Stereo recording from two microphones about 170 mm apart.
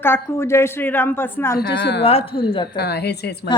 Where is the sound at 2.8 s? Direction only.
70° left (ahead or behind).